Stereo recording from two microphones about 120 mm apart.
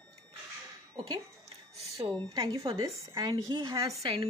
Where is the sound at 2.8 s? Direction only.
30° right (ahead or behind).